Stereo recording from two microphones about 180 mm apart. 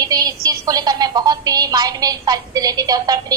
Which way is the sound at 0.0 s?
20° right (ahead or behind).